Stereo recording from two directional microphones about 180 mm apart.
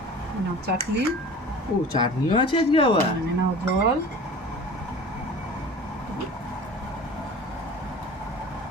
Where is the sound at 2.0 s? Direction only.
25° left (ahead or behind).